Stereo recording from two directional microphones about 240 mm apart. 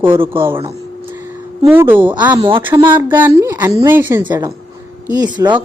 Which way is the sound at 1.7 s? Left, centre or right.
Centre.